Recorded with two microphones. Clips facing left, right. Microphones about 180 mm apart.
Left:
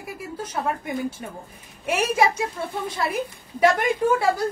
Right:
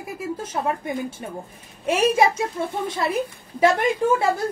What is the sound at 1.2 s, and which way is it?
A woman's voice, 25° right (ahead or behind).